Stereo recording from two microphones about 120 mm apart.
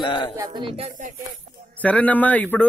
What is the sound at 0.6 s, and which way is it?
Speech, 50° right (ahead or behind).